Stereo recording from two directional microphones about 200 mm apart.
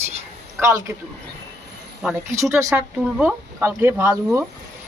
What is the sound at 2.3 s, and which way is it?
Speech, 15° right (ahead or behind).